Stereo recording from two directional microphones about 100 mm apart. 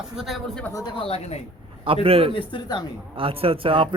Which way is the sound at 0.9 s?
80° left.